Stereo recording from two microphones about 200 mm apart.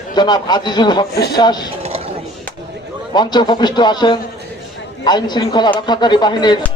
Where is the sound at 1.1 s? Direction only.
55° left (ahead or behind).